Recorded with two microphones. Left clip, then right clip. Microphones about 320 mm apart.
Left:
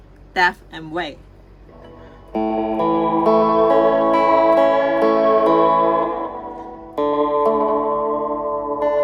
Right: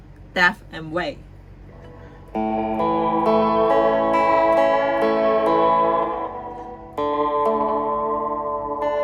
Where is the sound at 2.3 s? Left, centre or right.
Left.